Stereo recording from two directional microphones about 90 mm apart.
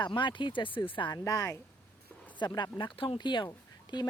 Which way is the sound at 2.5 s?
55° left (ahead or behind).